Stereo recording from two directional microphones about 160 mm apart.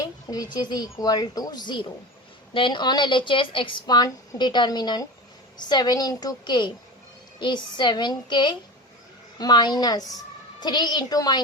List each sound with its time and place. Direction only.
0.0 s a woman's voice: 25° left (ahead or behind)